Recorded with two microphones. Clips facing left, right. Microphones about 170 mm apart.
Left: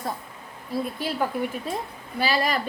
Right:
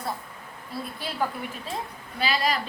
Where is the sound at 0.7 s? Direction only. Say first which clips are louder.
Left 7 dB; 45° left (ahead or behind).